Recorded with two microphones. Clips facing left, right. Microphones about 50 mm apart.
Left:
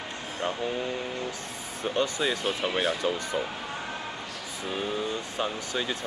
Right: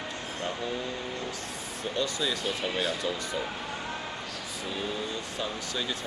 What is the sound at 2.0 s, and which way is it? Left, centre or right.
Speech, left.